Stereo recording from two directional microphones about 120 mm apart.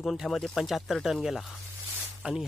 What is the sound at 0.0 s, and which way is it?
Speech, 5° left (ahead or behind).